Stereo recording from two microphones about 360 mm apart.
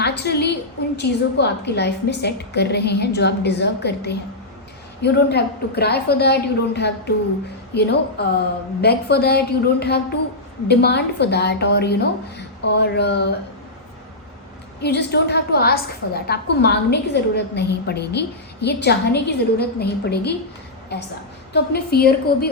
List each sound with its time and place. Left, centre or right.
0.0 s a sound: left
0.9 s a woman's voice: left
14.8 s a woman's voice: left